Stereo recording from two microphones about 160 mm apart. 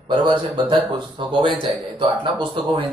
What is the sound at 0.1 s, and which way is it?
Speech, 30° right (ahead or behind).